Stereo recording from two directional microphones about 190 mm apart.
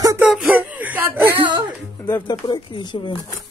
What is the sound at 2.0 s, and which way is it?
Speech, 20° left (ahead or behind).